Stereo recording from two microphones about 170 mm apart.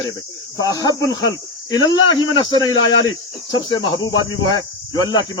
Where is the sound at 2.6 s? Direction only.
30° left (ahead or behind).